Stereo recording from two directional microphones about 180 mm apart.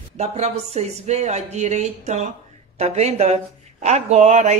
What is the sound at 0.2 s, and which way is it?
Speech, 35° right (ahead or behind).